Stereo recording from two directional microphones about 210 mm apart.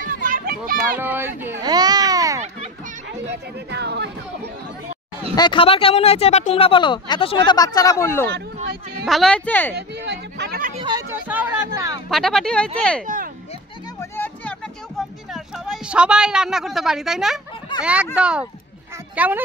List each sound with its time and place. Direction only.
0.0 s children playing: 40° right (ahead or behind)
0.9 s a sound: 10° right (ahead or behind)
3.7 s speech: 55° right (ahead or behind)
5.3 s speech: 20° left (ahead or behind)
9.0 s speech: centre (ahead or behind)
9.8 s a sound: 55° right (ahead or behind)
10.7 s speech: 20° right (ahead or behind)
11.1 s a sound: 10° right (ahead or behind)
12.1 s speech: centre (ahead or behind)
13.0 s speech: 40° right (ahead or behind)
14.1 s music: 10° left (ahead or behind)
18.1 s speech: 5° right (ahead or behind)